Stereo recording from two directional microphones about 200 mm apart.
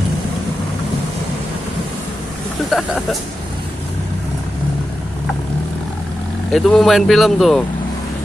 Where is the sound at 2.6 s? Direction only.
Centre (ahead or behind).